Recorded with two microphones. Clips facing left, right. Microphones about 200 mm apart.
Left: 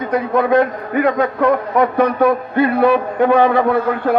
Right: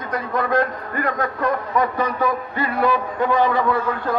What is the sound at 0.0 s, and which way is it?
A man's voice, 65° left (ahead or behind).